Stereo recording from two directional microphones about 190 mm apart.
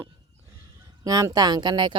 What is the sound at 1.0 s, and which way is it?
Speech, 20° right (ahead or behind).